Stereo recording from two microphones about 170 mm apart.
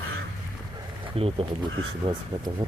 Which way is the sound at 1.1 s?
35° right (ahead or behind).